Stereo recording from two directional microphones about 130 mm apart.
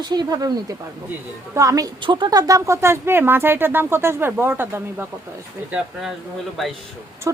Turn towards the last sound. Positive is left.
turn(degrees=-25)  # may be behind; listen again after turning